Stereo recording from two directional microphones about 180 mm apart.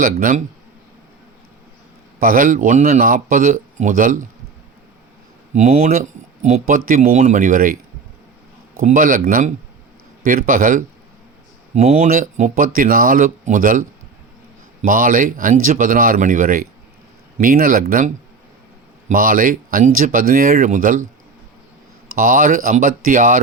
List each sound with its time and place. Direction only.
0.0 s speech: 50° right (ahead or behind)
2.2 s speech: 50° right (ahead or behind)
5.5 s speech: 40° right (ahead or behind)
8.8 s speech: 50° right (ahead or behind)
22.2 s speech: 50° right (ahead or behind)